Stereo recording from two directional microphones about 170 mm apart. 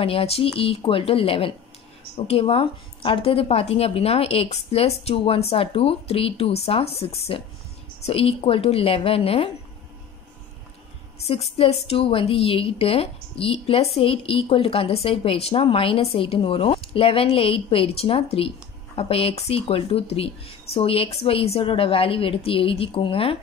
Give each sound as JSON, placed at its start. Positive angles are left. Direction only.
{"t": 0.0, "sound": "a woman's voice", "side_deg": 35}
{"t": 11.2, "sound": "a woman's voice", "side_deg": 35}